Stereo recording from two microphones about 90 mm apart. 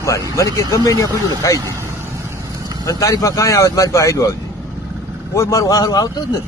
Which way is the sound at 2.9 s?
40° left (ahead or behind).